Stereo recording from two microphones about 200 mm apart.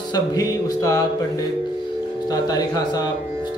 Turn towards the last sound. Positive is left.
turn(degrees=20)  # may be behind; listen again after turning